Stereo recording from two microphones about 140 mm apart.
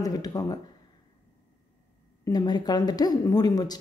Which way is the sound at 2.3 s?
30° left (ahead or behind).